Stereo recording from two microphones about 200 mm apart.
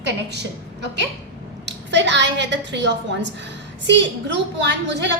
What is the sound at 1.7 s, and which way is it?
A woman's voice, 60° right (ahead or behind).